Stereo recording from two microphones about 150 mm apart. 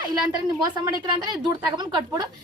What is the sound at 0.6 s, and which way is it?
A woman's voice, 25° right (ahead or behind).